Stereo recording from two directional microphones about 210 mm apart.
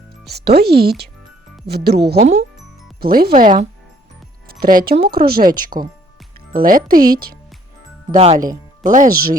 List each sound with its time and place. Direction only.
0.3 s speech: 50° right (ahead or behind)
2.1 s speech: 30° right (ahead or behind)
3.0 s speech: 45° right (ahead or behind)
5.7 s speech: 25° right (ahead or behind)
6.5 s speech: 45° right (ahead or behind)
8.1 s speech: 30° right (ahead or behind)
8.4 s speech: 40° right (ahead or behind)